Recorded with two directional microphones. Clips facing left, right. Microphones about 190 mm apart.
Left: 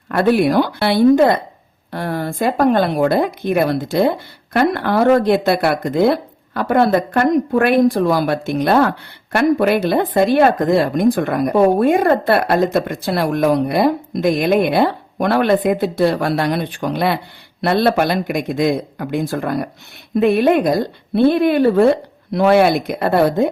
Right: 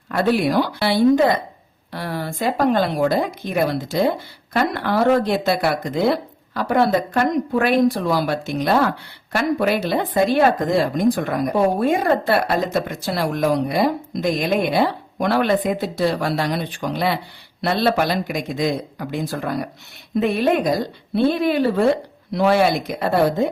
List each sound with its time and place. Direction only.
0.1 s speech: 55° left (ahead or behind)